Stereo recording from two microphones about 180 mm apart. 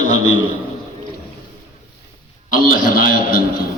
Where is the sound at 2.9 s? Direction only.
50° left (ahead or behind).